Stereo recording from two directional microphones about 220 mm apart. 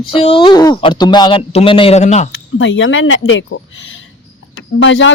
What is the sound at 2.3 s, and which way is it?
A woman's voice, 60° left (ahead or behind).